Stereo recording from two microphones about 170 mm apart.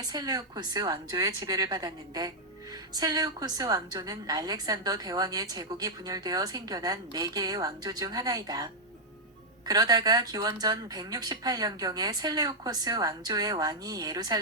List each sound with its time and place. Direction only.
0.0 s a woman's voice: 20° right (ahead or behind)